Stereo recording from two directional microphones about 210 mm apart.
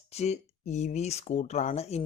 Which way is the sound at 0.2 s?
30° left (ahead or behind).